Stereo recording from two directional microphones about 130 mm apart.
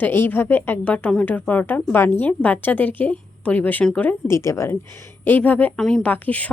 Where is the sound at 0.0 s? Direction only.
15° left (ahead or behind).